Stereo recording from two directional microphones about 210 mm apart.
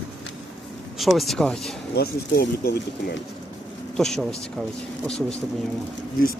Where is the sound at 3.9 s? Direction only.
Centre (ahead or behind).